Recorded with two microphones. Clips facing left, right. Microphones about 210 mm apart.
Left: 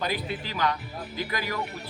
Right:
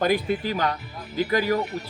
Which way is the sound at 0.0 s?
50° right (ahead or behind).